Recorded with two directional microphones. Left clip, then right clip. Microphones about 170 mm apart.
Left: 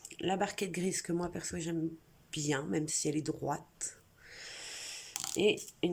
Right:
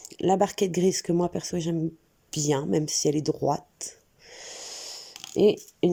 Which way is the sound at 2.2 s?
35° right (ahead or behind).